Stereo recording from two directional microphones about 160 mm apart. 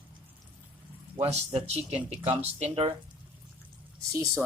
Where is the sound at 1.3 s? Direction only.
40° right (ahead or behind).